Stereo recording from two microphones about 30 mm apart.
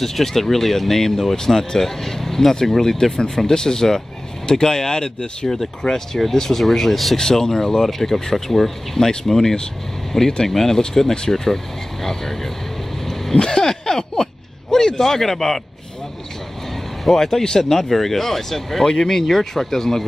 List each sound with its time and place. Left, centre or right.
0.0 s speech: centre
5.5 s speech: centre
7.2 s speech: centre
13.0 s vehicle: centre
13.4 s a sound: left
17.0 s speech: centre
17.4 s speech: centre